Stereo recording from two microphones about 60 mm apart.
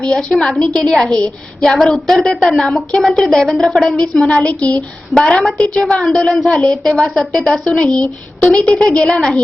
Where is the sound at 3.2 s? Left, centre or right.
Centre.